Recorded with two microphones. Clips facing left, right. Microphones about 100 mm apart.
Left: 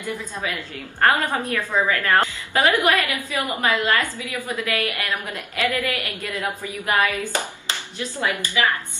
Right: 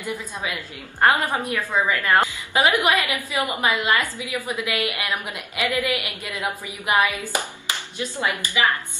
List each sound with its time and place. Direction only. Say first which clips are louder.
0.0 s a woman's voice: left 1 dB; 15° right (ahead or behind)